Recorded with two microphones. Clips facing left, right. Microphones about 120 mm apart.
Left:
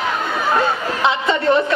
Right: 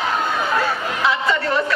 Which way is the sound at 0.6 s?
25° left (ahead or behind).